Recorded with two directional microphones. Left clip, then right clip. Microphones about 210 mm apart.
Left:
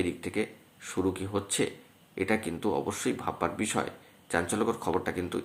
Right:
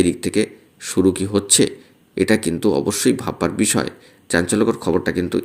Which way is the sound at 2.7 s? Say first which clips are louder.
Right 12 dB; 40° right (ahead or behind).